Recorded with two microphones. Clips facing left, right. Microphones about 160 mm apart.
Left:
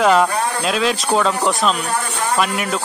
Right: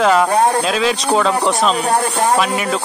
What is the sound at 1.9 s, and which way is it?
Speech, 55° right (ahead or behind).